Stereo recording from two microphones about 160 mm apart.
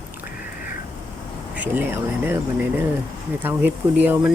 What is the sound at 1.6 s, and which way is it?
Speech, 10° right (ahead or behind).